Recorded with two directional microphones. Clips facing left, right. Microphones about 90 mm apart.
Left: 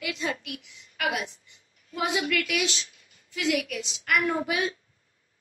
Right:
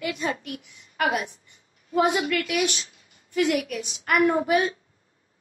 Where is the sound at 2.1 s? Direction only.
35° right (ahead or behind).